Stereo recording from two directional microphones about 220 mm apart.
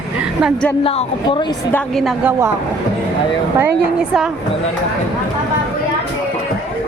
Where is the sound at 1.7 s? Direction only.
Centre (ahead or behind).